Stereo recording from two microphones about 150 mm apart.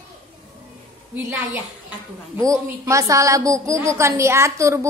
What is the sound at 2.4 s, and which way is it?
A woman's voice, 20° right (ahead or behind).